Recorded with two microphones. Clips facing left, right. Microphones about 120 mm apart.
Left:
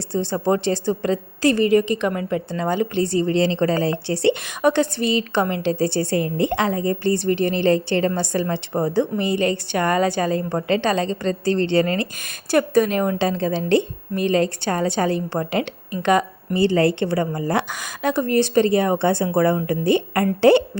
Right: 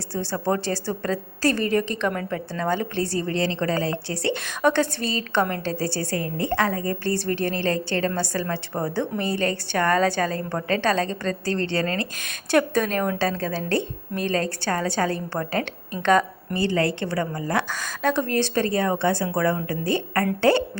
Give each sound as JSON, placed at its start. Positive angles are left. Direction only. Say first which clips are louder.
{"t": 0.1, "sound": "a woman's voice", "louder": "left 4 dB", "side_deg": 20}
{"t": 4.4, "sound": "a woman's voice", "louder": "left 3 dB", "side_deg": 15}
{"t": 12.2, "sound": "a woman's voice", "louder": "even", "side_deg": 10}
{"t": 16.6, "sound": "a woman's voice", "louder": "left 6 dB", "side_deg": 25}
{"t": 18.0, "sound": "a woman's voice", "louder": "left 3 dB", "side_deg": 10}